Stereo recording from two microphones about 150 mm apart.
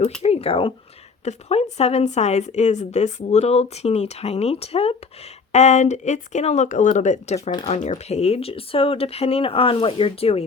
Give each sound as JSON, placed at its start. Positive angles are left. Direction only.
{"t": 0.2, "sound": "a woman's voice", "side_deg": 40}